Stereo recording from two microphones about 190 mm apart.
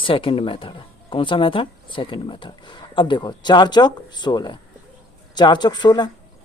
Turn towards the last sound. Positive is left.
turn(degrees=25)  # may be behind; listen again after turning